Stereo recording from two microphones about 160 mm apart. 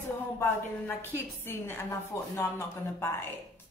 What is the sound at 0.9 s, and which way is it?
Speech, 15° left (ahead or behind).